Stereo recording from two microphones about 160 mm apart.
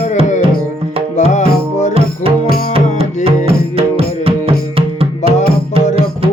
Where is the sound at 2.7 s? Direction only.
35° right (ahead or behind).